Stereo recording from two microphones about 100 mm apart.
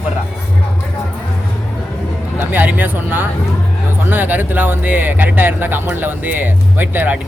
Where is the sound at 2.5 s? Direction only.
15° right (ahead or behind).